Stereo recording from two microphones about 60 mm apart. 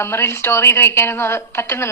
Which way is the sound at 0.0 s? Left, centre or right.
Left.